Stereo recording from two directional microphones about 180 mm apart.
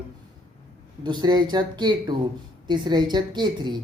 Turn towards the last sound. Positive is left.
turn(degrees=-25)  # may be behind; listen again after turning